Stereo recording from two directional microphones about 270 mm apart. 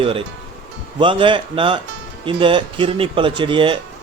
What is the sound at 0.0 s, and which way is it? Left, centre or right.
Speech, centre.